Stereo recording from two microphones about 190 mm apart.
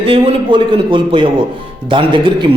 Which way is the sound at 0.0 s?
30° right (ahead or behind).